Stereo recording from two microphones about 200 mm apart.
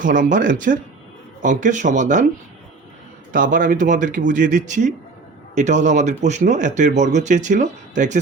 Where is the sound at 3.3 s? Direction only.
45° right (ahead or behind).